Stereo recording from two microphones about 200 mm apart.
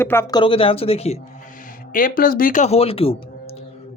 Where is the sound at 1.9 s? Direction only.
45° left (ahead or behind).